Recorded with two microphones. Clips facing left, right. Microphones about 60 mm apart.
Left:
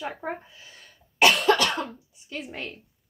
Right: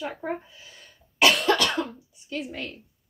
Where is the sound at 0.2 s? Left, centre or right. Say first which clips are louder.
Right 3 dB; left.